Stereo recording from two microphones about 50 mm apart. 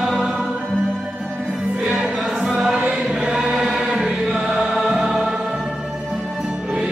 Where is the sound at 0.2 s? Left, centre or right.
Centre.